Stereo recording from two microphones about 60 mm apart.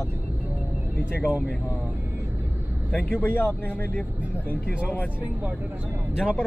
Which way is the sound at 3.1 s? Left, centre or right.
Left.